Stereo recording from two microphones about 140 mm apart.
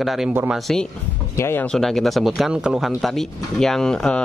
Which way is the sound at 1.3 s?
15° left (ahead or behind).